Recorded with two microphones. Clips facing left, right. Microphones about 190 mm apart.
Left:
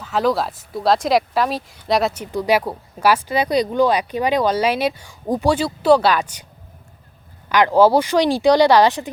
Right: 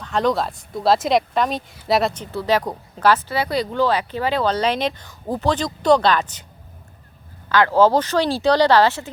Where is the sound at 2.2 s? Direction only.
15° left (ahead or behind).